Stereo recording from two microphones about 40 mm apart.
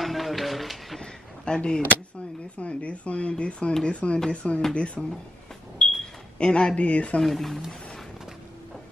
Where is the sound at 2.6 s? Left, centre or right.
Left.